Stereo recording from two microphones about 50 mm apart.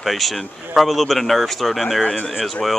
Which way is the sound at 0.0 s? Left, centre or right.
Centre.